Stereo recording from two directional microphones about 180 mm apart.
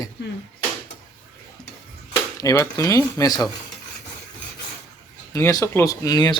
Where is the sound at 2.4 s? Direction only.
20° left (ahead or behind).